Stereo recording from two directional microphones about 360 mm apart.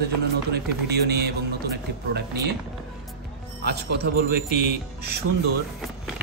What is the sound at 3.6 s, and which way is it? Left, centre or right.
Speech, right.